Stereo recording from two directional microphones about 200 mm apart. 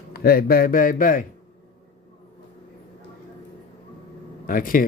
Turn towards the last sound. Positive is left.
turn(degrees=45)  # may be behind; listen again after turning